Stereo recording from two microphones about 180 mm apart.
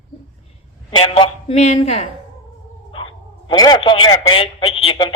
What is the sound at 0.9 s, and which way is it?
A man's voice, 30° left (ahead or behind).